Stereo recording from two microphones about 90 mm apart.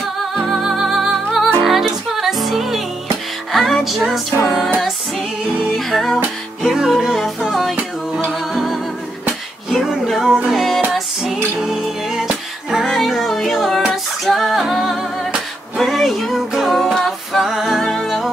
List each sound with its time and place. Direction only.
0.2 s music: centre (ahead or behind)
5.9 s music: centre (ahead or behind)
9.7 s a sound: centre (ahead or behind)
10.5 s music: centre (ahead or behind)
15.8 s female singing: centre (ahead or behind)